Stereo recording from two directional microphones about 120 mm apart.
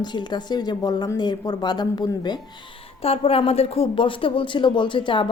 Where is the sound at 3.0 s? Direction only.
55° left (ahead or behind).